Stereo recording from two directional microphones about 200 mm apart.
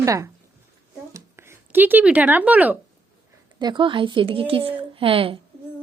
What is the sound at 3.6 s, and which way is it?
A woman's voice, 20° right (ahead or behind).